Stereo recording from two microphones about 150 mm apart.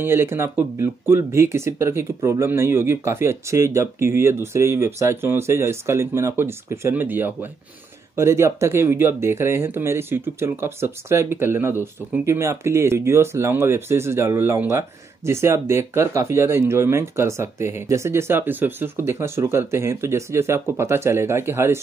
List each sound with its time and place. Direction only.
0.0 s speech: 15° right (ahead or behind)